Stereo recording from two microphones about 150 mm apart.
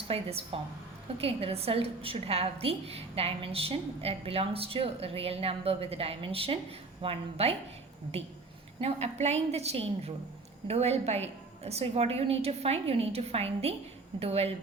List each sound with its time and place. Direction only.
0.1 s a woman's voice: 40° right (ahead or behind)
8.8 s a woman's voice: 45° right (ahead or behind)